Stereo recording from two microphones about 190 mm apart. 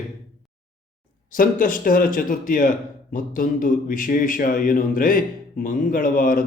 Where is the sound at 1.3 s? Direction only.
45° left (ahead or behind).